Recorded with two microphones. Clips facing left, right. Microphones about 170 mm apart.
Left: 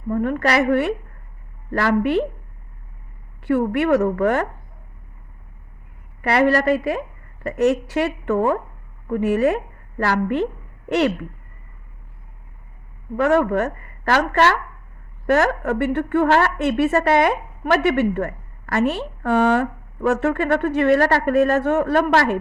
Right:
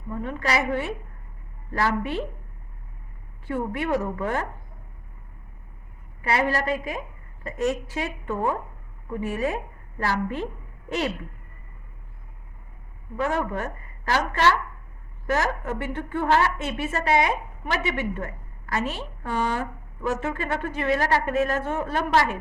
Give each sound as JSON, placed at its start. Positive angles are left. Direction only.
{"t": 0.1, "sound": "a woman's voice", "side_deg": 60}
{"t": 3.4, "sound": "a woman's voice", "side_deg": 70}
{"t": 6.2, "sound": "a woman's voice", "side_deg": 70}
{"t": 13.1, "sound": "a woman's voice", "side_deg": 70}